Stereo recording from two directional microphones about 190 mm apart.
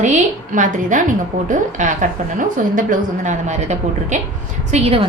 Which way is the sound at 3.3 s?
40° right (ahead or behind).